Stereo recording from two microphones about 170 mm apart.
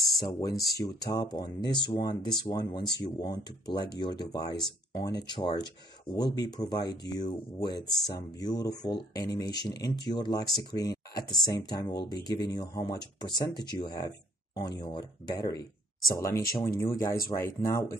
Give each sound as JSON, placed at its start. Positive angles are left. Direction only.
{"t": 0.2, "sound": "speech", "side_deg": 20}
{"t": 8.4, "sound": "speech", "side_deg": 25}